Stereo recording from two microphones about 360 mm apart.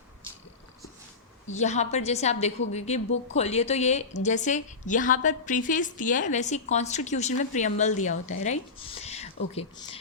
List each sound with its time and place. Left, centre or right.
1.5 s a woman's voice: centre